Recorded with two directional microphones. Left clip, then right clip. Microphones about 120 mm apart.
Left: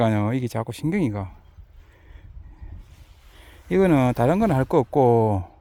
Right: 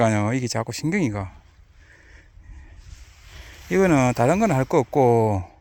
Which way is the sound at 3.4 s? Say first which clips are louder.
Even; 15° left (ahead or behind).